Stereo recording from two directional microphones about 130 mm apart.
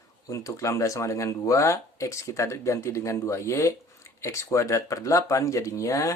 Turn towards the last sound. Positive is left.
turn(degrees=25)  # may be behind; listen again after turning